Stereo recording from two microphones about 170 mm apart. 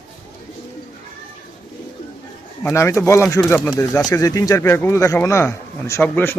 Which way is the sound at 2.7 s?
15° left (ahead or behind).